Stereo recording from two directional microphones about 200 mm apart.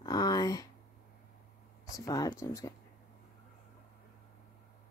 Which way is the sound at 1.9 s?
15° left (ahead or behind).